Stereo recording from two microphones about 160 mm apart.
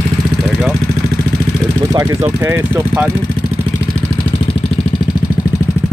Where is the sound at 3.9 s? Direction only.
15° left (ahead or behind).